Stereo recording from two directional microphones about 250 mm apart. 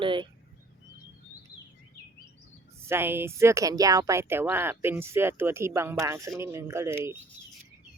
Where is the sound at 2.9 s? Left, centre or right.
Centre.